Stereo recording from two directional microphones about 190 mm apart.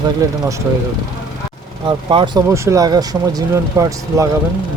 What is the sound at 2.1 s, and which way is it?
Speech, 25° right (ahead or behind).